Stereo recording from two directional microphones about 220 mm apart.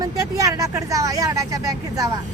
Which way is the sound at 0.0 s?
15° right (ahead or behind).